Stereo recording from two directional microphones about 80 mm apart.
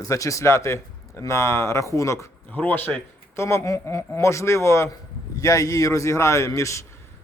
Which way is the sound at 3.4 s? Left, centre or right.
Left.